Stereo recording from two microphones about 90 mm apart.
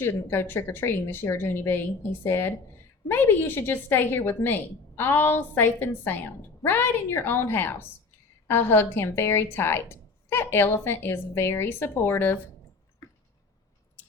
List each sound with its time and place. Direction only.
0.0 s a woman's voice: 25° left (ahead or behind)